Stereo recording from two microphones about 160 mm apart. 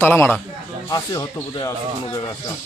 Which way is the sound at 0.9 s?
25° left (ahead or behind).